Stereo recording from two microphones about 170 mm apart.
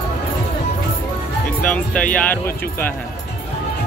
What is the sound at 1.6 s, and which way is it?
Speech, 10° left (ahead or behind).